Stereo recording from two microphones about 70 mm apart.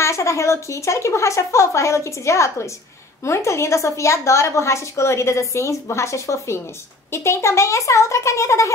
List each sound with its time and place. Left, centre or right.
0.0 s a woman's voice: left